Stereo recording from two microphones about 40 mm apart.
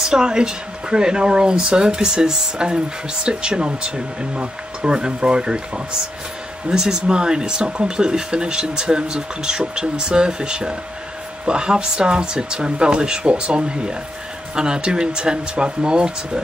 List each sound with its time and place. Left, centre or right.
0.1 s speech: centre
6.7 s speech: centre